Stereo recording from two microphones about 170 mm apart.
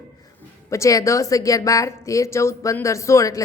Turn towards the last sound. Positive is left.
turn(degrees=20)  # may be behind; listen again after turning